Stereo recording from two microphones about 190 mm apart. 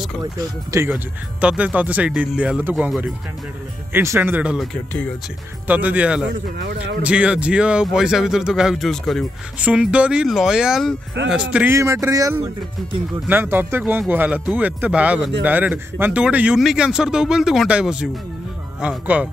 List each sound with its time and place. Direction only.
0.2 s speech: 20° right (ahead or behind)
5.7 s speech: 10° right (ahead or behind)
6.3 s speech: 60° right (ahead or behind)
7.0 s speech: 5° right (ahead or behind)
11.5 s speech: 10° right (ahead or behind)